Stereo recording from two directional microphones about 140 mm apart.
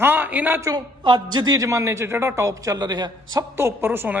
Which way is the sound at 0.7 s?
35° right (ahead or behind).